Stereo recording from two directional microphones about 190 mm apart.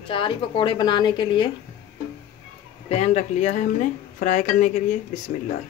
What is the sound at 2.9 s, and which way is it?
Speech, 35° left (ahead or behind).